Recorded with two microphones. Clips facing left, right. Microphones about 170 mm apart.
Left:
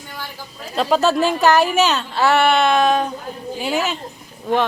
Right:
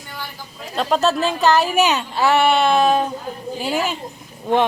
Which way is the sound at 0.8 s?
Centre (ahead or behind).